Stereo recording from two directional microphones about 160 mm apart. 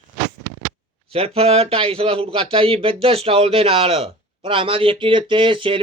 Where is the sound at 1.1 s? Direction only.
40° right (ahead or behind).